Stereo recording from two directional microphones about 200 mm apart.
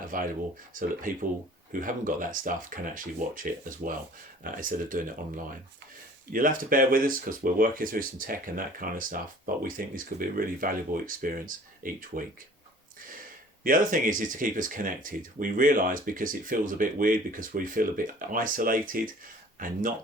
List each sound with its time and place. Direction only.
0.1 s speech: 45° right (ahead or behind)
6.3 s speech: 45° right (ahead or behind)
13.0 s a sound: 45° right (ahead or behind)
13.7 s speech: 40° right (ahead or behind)